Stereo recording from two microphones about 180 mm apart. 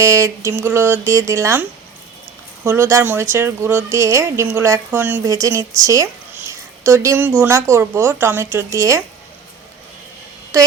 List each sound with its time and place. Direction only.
0.0 s a woman's voice: 15° right (ahead or behind)
2.6 s a woman's voice: 15° right (ahead or behind)
6.5 s a sound: 15° right (ahead or behind)
7.4 s a woman's voice: 15° right (ahead or behind)
10.5 s a woman's voice: 20° right (ahead or behind)